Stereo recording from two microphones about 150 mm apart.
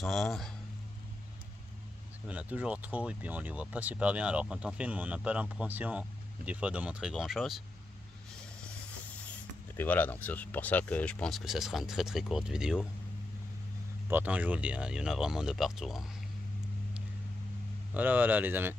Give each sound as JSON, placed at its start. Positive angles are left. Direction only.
{"t": 0.0, "sound": "speech", "side_deg": 0}
{"t": 2.2, "sound": "speech", "side_deg": -10}
{"t": 9.8, "sound": "speech", "side_deg": 10}
{"t": 14.0, "sound": "speech", "side_deg": -10}
{"t": 17.9, "sound": "speech", "side_deg": -10}